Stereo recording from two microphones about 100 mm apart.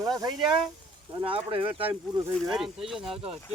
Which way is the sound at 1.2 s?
65° right (ahead or behind).